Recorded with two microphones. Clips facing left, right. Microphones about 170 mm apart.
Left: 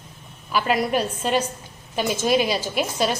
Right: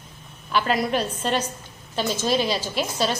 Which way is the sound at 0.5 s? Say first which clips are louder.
Left 1 dB; 5° left (ahead or behind).